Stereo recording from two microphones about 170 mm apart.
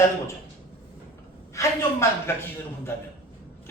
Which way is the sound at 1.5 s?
15° left (ahead or behind).